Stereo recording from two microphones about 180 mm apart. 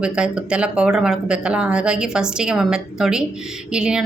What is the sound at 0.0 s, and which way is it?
Speech, 5° right (ahead or behind).